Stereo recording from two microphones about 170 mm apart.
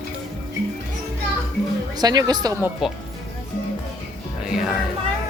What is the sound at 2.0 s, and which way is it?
Speech, 25° right (ahead or behind).